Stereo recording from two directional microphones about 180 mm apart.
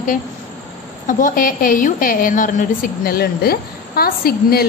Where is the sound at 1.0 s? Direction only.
50° left (ahead or behind).